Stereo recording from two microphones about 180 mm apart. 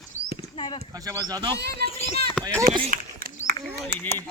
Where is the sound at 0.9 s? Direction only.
20° right (ahead or behind).